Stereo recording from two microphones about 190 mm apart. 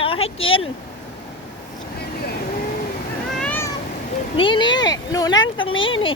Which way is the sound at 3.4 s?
10° left (ahead or behind).